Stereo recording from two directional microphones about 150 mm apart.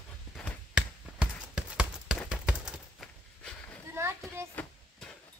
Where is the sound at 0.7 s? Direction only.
5° right (ahead or behind).